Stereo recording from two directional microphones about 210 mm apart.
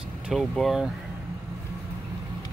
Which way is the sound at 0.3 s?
Centre (ahead or behind).